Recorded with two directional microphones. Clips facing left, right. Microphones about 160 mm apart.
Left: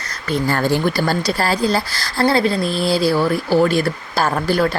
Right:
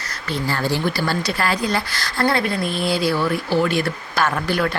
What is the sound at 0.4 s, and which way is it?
Speech, 50° left (ahead or behind).